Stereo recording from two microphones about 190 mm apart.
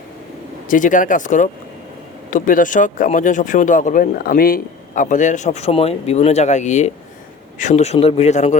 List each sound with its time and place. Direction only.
0.7 s speech: 45° left (ahead or behind)